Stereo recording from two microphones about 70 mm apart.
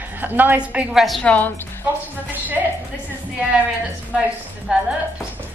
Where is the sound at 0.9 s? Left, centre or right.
Centre.